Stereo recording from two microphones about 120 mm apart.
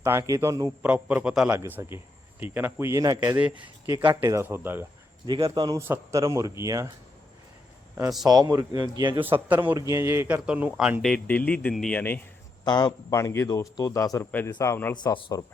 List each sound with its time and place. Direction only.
0.0 s speech: 25° right (ahead or behind)
0.8 s a man's voice: 10° right (ahead or behind)
3.3 s a man's voice: 10° right (ahead or behind)
4.2 s speech: 25° right (ahead or behind)
5.2 s speech: 40° right (ahead or behind)
5.9 s speech: 25° right (ahead or behind)
8.2 s speech: 30° right (ahead or behind)
9.2 s a man's voice: 15° right (ahead or behind)
10.2 s a man's voice: 10° right (ahead or behind)
11.0 s a man's voice: 10° left (ahead or behind)
11.9 s a man's voice: 15° left (ahead or behind)
12.6 s a man's voice: 35° left (ahead or behind)
14.3 s a man's voice: 15° left (ahead or behind)
14.9 s speech: 35° left (ahead or behind)